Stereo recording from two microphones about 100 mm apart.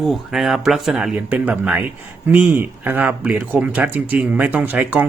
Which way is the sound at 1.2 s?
15° right (ahead or behind).